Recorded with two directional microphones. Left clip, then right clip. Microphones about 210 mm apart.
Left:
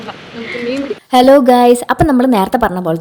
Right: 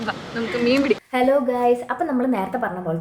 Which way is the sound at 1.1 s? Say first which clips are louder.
Left 14 dB; 50° left (ahead or behind).